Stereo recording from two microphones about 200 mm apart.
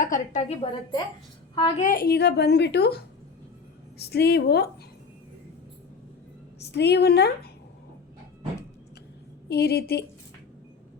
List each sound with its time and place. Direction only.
0.0 s a woman's voice: 40° left (ahead or behind)
1.8 s a woman's voice: 45° left (ahead or behind)
6.6 s a woman's voice: 55° left (ahead or behind)
9.5 s speech: 55° left (ahead or behind)